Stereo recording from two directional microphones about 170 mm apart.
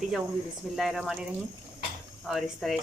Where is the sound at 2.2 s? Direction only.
Centre (ahead or behind).